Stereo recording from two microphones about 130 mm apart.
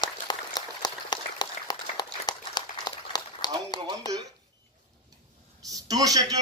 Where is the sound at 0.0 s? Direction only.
35° left (ahead or behind).